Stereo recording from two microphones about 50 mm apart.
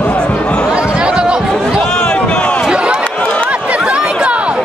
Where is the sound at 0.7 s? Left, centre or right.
Centre.